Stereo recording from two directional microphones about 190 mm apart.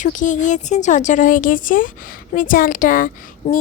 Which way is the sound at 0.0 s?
40° left (ahead or behind).